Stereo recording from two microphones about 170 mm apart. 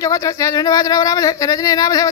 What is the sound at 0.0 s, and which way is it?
Speech, 20° left (ahead or behind).